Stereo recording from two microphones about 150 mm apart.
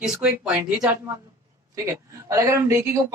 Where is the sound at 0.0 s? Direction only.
5° right (ahead or behind).